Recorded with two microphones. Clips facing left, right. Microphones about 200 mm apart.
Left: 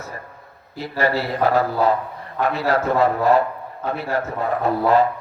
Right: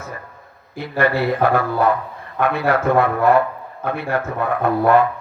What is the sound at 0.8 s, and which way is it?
A man's voice, 55° right (ahead or behind).